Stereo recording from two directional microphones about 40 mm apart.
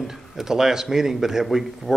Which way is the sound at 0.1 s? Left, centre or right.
Centre.